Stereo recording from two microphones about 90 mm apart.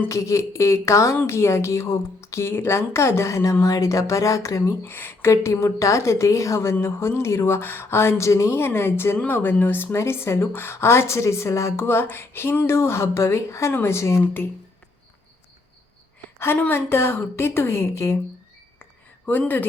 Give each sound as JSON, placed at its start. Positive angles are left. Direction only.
{"t": 0.1, "sound": "speech", "side_deg": 35}
{"t": 4.9, "sound": "speech", "side_deg": 25}
{"t": 16.4, "sound": "speech", "side_deg": 25}
{"t": 18.8, "sound": "a sound", "side_deg": 20}